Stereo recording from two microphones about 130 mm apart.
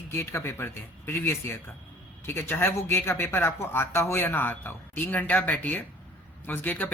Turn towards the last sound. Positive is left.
turn(degrees=15)  # may be behind; listen again after turning